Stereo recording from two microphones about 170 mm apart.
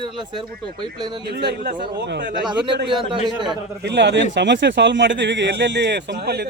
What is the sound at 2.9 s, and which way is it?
Speech, 30° right (ahead or behind).